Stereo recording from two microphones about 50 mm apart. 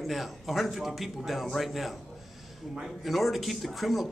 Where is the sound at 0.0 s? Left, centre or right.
Centre.